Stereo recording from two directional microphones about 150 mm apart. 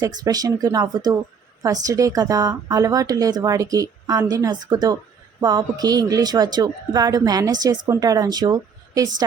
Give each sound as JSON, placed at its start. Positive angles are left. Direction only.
{"t": 0.0, "sound": "a woman's voice", "side_deg": -25}